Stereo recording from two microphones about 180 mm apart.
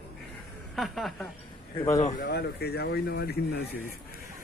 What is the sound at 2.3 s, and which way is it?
Speech, 65° left (ahead or behind).